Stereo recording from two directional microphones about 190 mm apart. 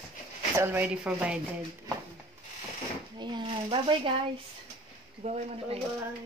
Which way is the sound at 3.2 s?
25° right (ahead or behind).